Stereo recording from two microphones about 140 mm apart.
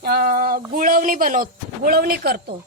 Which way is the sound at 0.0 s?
90° right.